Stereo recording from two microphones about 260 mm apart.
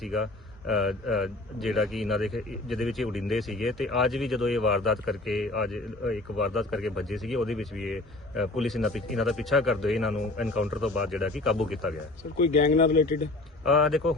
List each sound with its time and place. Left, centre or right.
0.0 s a man's voice: centre
12.5 s speech: left
13.7 s a man's voice: centre